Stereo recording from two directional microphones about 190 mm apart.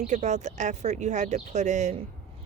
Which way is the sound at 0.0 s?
40° right (ahead or behind).